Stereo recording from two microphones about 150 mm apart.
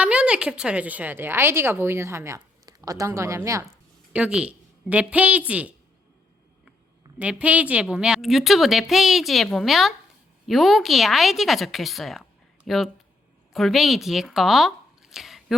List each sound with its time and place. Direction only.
0.0 s a woman's voice: 10° right (ahead or behind)
4.1 s a woman's voice: 10° right (ahead or behind)
7.2 s a woman's voice: 10° right (ahead or behind)